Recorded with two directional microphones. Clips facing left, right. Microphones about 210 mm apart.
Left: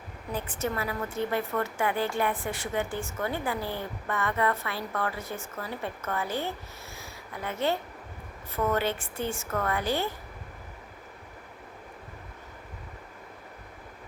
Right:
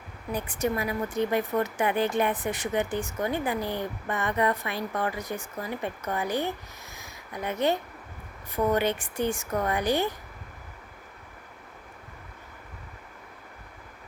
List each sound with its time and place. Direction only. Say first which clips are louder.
0.3 s a woman's voice: right 3 dB; 15° right (ahead or behind)
6.9 s a sound: right 3 dB; 20° right (ahead or behind)
8.5 s a woman's voice: right 3 dB; 15° right (ahead or behind)